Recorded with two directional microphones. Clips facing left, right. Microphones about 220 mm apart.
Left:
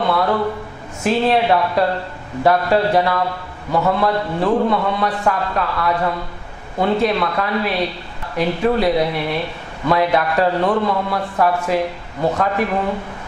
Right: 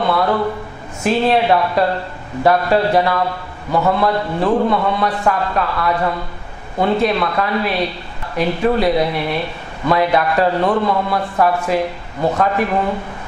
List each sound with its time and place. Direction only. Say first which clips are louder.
0.0 s a man's voice: right 1 dB; 15° right (ahead or behind)